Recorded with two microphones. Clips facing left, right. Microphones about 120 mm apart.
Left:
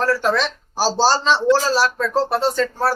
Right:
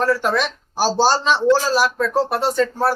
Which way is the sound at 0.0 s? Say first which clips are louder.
Even; 10° right (ahead or behind).